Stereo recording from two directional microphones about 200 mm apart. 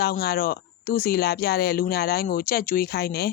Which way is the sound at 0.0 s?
50° left (ahead or behind).